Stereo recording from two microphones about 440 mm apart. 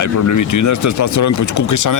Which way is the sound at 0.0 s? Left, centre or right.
Left.